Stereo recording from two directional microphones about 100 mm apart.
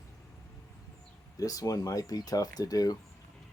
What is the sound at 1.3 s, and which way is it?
Speech, 35° left (ahead or behind).